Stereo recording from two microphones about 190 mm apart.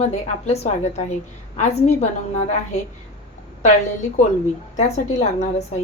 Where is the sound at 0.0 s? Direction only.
35° left (ahead or behind).